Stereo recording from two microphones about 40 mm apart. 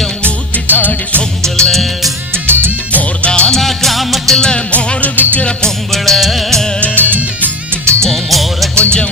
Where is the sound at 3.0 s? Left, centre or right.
Left.